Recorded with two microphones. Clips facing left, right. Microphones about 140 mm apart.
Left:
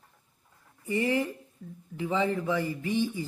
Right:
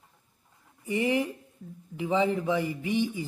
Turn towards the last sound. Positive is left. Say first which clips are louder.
# right 1 dB
turn(degrees=-15)  # may be behind; listen again after turning